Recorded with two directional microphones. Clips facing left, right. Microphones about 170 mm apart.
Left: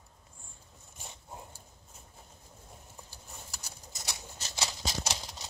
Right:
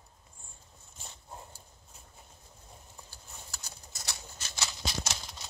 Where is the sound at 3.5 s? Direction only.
10° left (ahead or behind).